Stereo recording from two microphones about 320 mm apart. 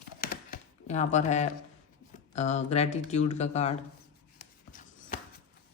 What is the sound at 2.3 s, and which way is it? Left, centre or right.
Speech, left.